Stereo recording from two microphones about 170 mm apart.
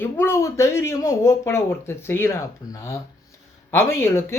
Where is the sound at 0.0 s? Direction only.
15° left (ahead or behind).